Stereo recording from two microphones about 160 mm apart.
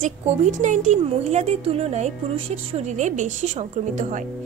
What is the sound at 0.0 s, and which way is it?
Speech, 50° right (ahead or behind).